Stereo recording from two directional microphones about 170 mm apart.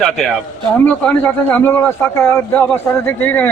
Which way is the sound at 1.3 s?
10° left (ahead or behind).